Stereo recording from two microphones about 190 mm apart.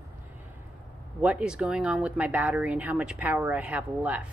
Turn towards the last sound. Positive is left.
turn(degrees=-5)  # may be behind; listen again after turning